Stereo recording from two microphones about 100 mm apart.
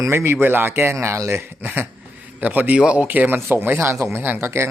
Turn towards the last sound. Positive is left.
turn(degrees=-25)  # may be behind; listen again after turning